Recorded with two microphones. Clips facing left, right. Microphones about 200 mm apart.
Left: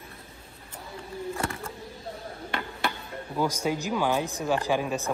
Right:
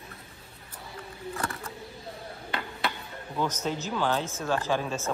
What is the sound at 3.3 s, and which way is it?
A man's voice, 10° left (ahead or behind).